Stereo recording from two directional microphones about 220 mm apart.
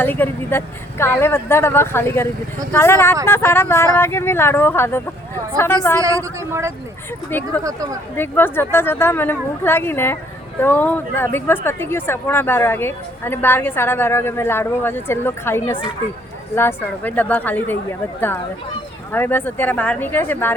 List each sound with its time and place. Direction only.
0.0 s speech: 10° left (ahead or behind)
6.4 s speech: 10° right (ahead or behind)
7.3 s speech: 10° left (ahead or behind)
7.6 s speech: 15° right (ahead or behind)
8.1 s speech: 10° left (ahead or behind)
19.1 s speech: 10° left (ahead or behind)